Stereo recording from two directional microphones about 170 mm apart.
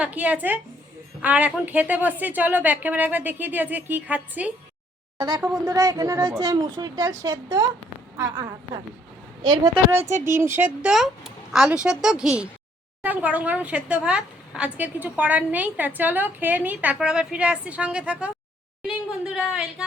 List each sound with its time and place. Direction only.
0.0 s a woman's voice: 10° right (ahead or behind)
5.1 s speech: 25° right (ahead or behind)
9.7 s a woman's voice: 10° right (ahead or behind)